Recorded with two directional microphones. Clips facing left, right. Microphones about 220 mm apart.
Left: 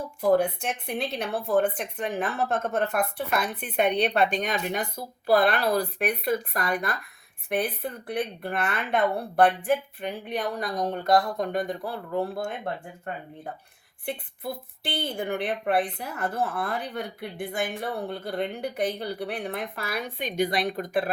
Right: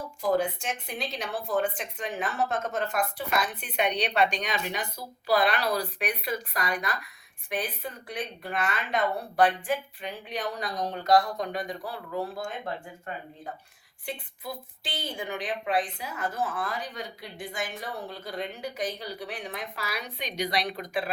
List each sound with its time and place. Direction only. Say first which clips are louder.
0.2 s a woman's voice: left 4 dB; 60° left (ahead or behind)
14.0 s a woman's voice: left 4 dB; 60° left (ahead or behind)